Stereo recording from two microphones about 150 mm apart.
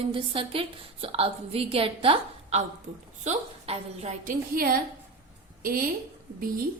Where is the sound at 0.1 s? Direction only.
35° right (ahead or behind); by 4.8 s 75° right (ahead or behind).